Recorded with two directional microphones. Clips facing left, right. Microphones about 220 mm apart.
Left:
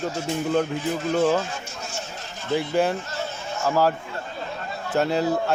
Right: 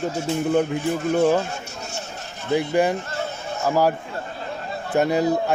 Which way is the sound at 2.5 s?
15° right (ahead or behind).